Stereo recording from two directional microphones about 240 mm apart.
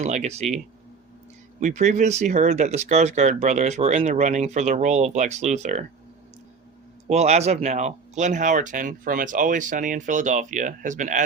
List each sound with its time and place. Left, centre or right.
0.0 s speech: right
1.5 s speech: right
7.1 s speech: right